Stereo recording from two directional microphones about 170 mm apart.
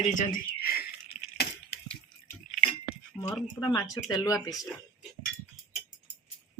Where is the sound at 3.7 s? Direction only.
20° left (ahead or behind).